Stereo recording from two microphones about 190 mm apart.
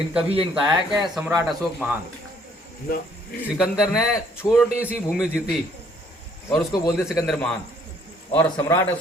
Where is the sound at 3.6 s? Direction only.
Centre (ahead or behind).